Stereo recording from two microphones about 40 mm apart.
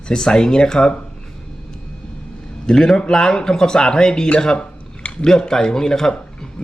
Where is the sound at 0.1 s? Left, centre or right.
Centre.